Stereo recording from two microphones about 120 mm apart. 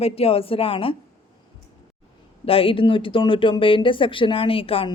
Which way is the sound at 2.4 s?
50° left (ahead or behind).